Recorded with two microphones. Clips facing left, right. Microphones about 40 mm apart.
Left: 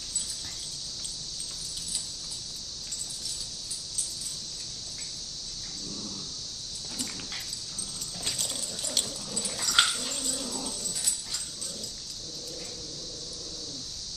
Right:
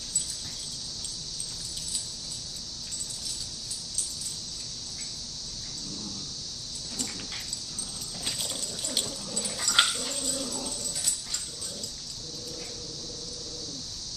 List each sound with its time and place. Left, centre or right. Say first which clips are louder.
8.3 s dog: even; centre